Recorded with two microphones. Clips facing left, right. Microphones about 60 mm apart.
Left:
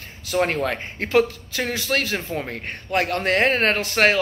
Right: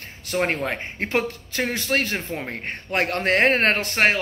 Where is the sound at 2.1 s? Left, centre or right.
Centre.